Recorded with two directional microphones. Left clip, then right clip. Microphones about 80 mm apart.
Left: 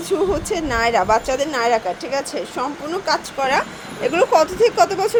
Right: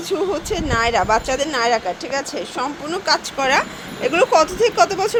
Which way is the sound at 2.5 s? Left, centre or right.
Centre.